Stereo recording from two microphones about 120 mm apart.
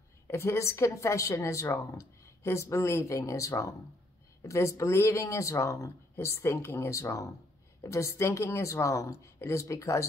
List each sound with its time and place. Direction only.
0.3 s speech: 25° left (ahead or behind)